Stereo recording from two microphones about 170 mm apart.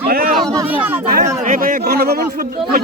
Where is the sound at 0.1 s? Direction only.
60° right (ahead or behind).